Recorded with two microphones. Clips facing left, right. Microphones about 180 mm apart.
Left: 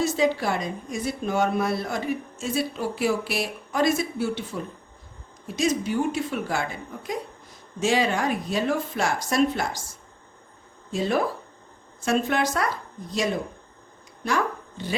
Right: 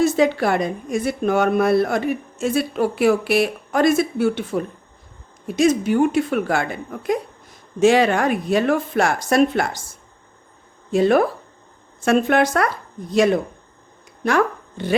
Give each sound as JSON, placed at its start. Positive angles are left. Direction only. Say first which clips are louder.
{"t": 0.0, "sound": "a woman's voice", "louder": "right 6 dB", "side_deg": -60}
{"t": 10.9, "sound": "a woman's voice", "louder": "right 8 dB", "side_deg": -60}